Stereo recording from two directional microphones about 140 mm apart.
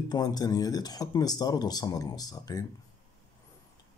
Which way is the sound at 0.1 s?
30° left (ahead or behind).